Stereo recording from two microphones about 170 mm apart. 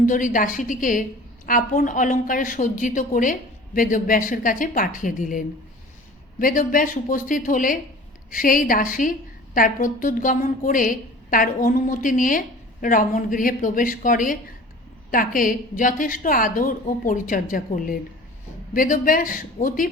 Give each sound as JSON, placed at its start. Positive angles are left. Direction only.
{"t": 0.0, "sound": "a woman's voice", "side_deg": 50}